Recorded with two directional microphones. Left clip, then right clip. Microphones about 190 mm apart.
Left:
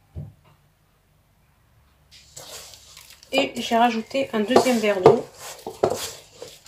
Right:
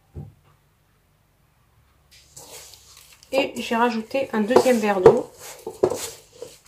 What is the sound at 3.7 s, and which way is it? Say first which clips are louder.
Speech: left 3 dB; 20° right (ahead or behind).